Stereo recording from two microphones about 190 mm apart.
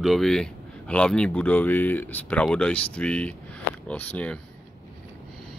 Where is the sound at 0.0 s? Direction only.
Centre (ahead or behind).